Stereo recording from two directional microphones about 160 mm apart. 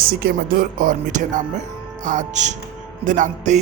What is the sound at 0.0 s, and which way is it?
Speech, 70° right (ahead or behind).